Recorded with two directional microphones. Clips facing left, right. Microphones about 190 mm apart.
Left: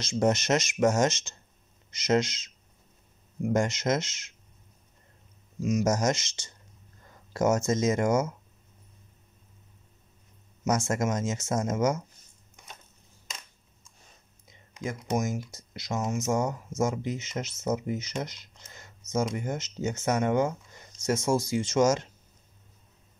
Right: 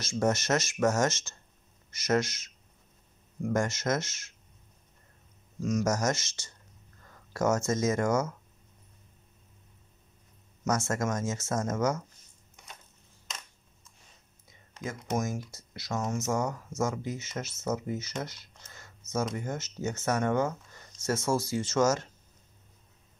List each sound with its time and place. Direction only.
0.0 s speech: 20° left (ahead or behind)
5.6 s speech: 10° left (ahead or behind)
5.9 s speech: 20° left (ahead or behind)
10.7 s speech: 20° left (ahead or behind)
14.5 s speech: 15° left (ahead or behind)